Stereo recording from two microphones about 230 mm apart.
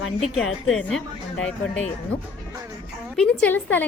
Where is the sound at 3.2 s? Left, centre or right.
Centre.